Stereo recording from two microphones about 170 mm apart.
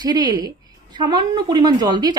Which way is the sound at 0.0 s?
25° right (ahead or behind).